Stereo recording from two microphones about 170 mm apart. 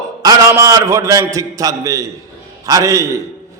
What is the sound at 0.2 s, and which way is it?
A man's voice, 20° right (ahead or behind).